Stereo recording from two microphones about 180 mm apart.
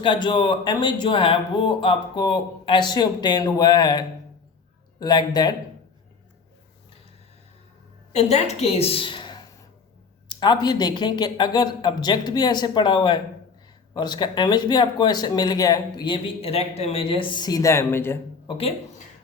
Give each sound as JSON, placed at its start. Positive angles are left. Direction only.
{"t": 0.0, "sound": "speech", "side_deg": 25}
{"t": 8.1, "sound": "a woman's voice", "side_deg": 40}
{"t": 18.4, "sound": "speech", "side_deg": 30}